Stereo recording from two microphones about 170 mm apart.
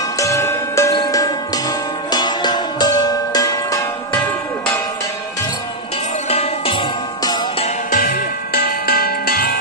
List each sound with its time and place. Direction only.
0.2 s music: 15° left (ahead or behind)
6.2 s music: 35° left (ahead or behind)
7.9 s music: 60° left (ahead or behind)